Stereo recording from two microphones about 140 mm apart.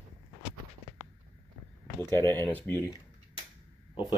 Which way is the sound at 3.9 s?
30° left (ahead or behind).